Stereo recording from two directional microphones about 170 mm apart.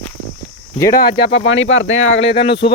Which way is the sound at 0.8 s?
20° left (ahead or behind).